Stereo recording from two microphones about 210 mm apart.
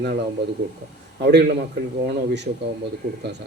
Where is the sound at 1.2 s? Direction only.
50° right (ahead or behind).